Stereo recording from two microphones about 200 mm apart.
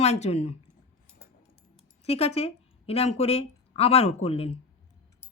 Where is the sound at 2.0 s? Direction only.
30° left (ahead or behind).